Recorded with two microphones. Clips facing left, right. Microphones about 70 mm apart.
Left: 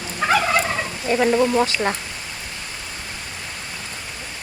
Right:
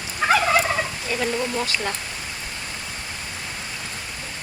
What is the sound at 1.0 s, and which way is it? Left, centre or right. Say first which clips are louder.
Speech: left 12 dB; left.